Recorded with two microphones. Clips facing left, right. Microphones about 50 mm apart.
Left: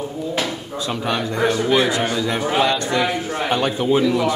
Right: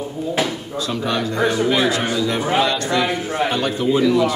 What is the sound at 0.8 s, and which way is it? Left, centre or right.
Speech, left.